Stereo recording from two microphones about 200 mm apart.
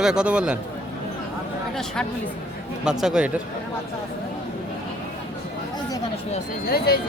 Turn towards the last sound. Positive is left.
turn(degrees=50)  # may be behind; listen again after turning